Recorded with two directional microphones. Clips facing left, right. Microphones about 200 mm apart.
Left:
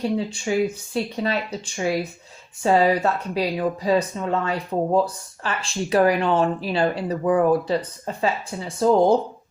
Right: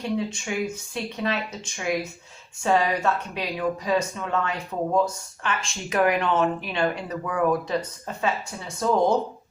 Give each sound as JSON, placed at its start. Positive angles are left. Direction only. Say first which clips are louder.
{"t": 0.2, "sound": "speech", "louder": "left 5 dB", "side_deg": 30}